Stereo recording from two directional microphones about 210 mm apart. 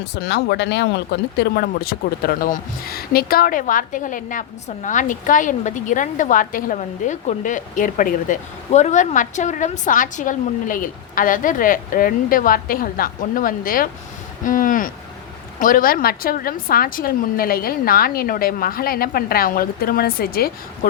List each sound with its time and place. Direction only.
0.1 s a woman's voice: 50° left (ahead or behind)